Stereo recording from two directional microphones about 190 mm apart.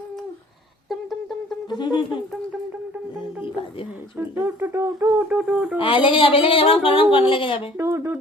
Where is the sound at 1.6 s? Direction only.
25° left (ahead or behind).